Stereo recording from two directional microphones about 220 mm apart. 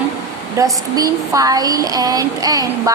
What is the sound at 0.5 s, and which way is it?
A woman's voice, 15° right (ahead or behind).